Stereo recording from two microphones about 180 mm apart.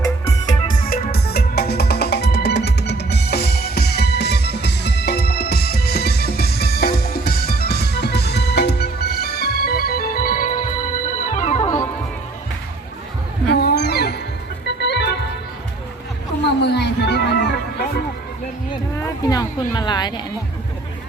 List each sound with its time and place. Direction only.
0.7 s music: 50° left (ahead or behind)
1.1 s music: 60° left (ahead or behind)
11.3 s organ: 40° left (ahead or behind)
13.5 s a sound: 60° left (ahead or behind)
14.8 s organ: 70° left (ahead or behind)
16.5 s music: 70° left (ahead or behind)
18.9 s a sound: 20° left (ahead or behind)